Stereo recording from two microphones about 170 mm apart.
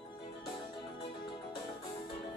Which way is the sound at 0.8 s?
30° left (ahead or behind).